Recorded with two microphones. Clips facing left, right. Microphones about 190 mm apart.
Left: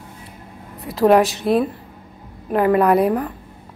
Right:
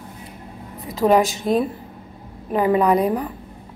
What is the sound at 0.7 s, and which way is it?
A woman's voice, centre (ahead or behind).